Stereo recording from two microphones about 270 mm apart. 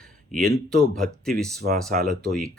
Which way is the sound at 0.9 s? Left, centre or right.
Centre.